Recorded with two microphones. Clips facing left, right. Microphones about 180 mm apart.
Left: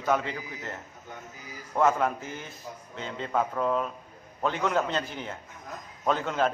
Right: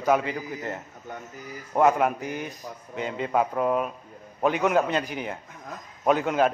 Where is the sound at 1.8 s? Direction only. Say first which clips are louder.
Right 3 dB; 15° right (ahead or behind).